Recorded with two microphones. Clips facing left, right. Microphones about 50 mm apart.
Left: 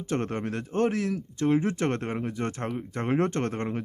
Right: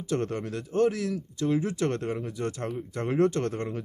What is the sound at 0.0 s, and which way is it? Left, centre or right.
Speech, left.